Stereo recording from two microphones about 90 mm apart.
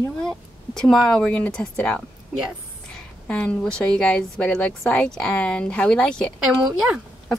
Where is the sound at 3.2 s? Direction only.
15° left (ahead or behind).